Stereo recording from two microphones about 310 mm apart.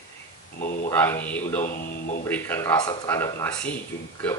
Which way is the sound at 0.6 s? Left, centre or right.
Left.